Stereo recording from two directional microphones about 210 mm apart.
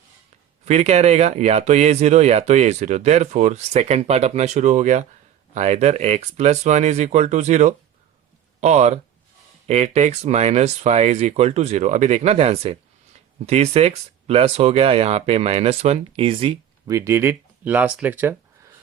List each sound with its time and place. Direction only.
0.6 s speech: 30° right (ahead or behind); by 18.3 s 10° right (ahead or behind)